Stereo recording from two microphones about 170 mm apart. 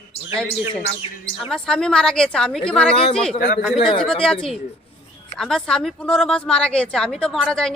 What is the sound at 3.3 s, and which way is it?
Speech, 60° left (ahead or behind).